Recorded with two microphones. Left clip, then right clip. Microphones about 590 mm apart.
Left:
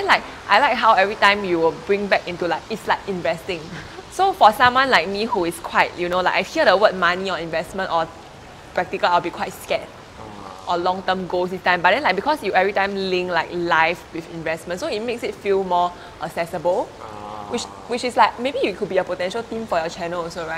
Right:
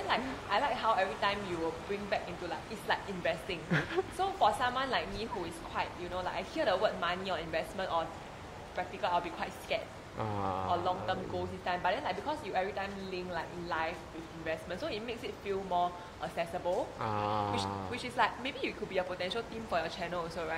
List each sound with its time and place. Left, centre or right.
0.1 s a woman's voice: left
17.6 s a woman's voice: left